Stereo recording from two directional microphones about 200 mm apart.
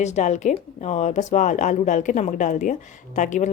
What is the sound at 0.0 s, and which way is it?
Speech, 35° left (ahead or behind).